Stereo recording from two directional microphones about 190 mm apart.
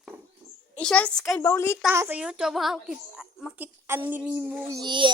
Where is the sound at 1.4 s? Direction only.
15° left (ahead or behind).